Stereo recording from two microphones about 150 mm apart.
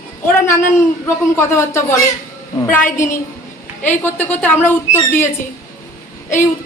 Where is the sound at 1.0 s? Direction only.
20° left (ahead or behind).